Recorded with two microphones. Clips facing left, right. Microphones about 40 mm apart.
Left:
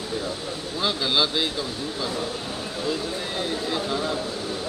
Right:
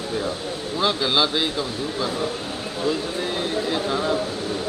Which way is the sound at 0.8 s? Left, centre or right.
Centre.